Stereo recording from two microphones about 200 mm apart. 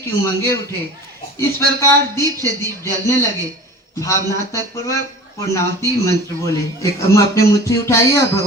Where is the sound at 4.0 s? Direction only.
15° left (ahead or behind).